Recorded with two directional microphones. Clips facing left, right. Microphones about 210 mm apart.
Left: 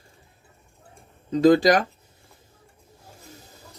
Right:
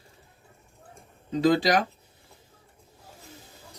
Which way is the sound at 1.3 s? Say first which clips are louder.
Left 5 dB; 45° left (ahead or behind).